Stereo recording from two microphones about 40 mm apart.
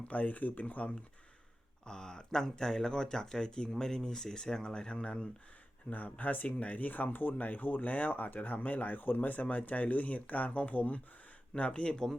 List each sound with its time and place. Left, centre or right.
0.1 s speech: left
1.8 s speech: centre
5.9 s speech: left
11.5 s speech: left